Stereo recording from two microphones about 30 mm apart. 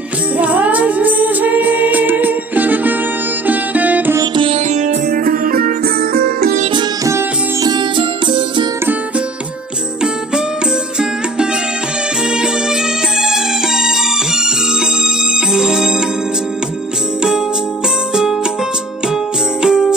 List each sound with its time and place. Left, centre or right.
0.4 s music: right
13.2 s music: centre
15.5 s music: centre
19.6 s jingle bell: centre